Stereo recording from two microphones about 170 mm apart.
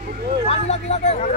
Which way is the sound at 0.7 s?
40° left (ahead or behind).